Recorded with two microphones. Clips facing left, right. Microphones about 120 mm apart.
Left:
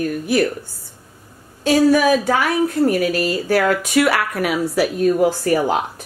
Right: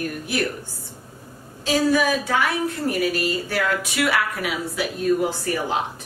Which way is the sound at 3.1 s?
45° left (ahead or behind).